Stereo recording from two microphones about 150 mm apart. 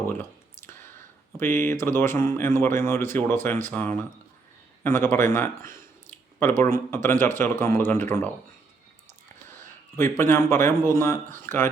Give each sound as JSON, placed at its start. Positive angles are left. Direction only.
{"t": 0.0, "sound": "clicking", "side_deg": 15}
{"t": 1.4, "sound": "speech", "side_deg": 15}
{"t": 10.0, "sound": "speech", "side_deg": 15}